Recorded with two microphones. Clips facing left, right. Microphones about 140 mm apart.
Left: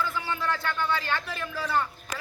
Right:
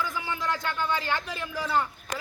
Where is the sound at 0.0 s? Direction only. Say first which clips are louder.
Left 1 dB; 15° right (ahead or behind).